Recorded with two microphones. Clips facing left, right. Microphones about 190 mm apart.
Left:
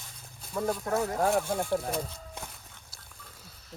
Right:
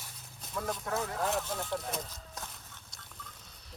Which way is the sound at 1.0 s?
45° left (ahead or behind).